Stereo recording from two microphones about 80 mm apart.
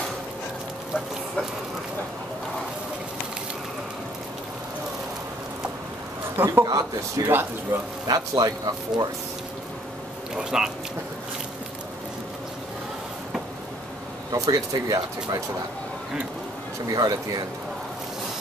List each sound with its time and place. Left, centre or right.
6.3 s speech: right
6.6 s speech: right
7.2 s speech: right
8.1 s speech: right
10.3 s speech: centre
14.3 s speech: right
16.9 s speech: right